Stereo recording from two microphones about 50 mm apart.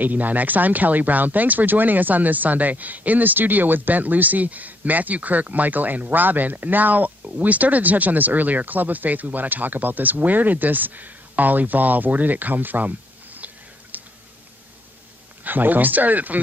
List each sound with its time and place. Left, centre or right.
0.0 s speech: right
13.9 s a sound: right
15.4 s speech: right